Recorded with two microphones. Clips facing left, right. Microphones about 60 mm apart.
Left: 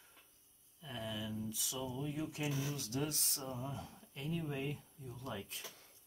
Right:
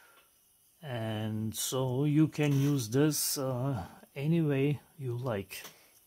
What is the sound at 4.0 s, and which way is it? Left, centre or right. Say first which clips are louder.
Speech: right 12 dB; right.